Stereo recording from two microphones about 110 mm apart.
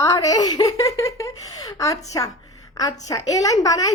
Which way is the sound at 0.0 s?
30° left (ahead or behind).